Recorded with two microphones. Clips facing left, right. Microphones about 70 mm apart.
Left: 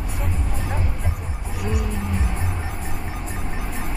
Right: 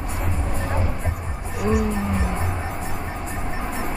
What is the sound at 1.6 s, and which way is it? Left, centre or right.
Music, right.